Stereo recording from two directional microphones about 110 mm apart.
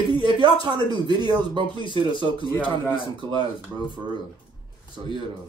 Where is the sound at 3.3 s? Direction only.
45° left (ahead or behind).